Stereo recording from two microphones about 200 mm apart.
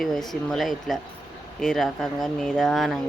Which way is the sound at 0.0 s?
Centre (ahead or behind).